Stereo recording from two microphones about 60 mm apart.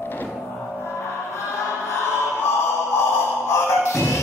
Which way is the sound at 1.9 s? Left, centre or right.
Left.